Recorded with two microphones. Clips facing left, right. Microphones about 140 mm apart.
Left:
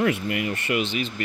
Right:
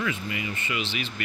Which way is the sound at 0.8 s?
40° left (ahead or behind).